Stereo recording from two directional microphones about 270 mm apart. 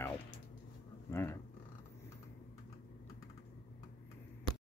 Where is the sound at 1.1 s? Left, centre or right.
Centre.